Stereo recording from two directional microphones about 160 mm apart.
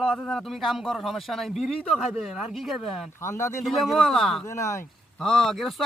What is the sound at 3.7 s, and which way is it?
Speech, centre (ahead or behind).